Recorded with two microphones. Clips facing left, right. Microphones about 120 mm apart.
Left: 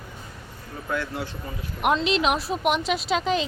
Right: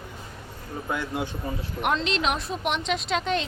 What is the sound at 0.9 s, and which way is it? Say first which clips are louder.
Speech: even; 15° right (ahead or behind).